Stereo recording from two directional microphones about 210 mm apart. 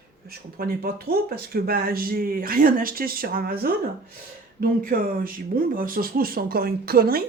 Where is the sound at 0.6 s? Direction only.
45° right (ahead or behind).